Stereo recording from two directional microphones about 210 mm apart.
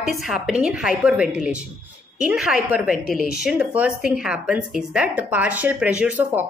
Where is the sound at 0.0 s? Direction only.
Centre (ahead or behind).